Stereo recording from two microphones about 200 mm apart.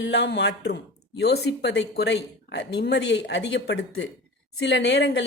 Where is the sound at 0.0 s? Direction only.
60° left (ahead or behind).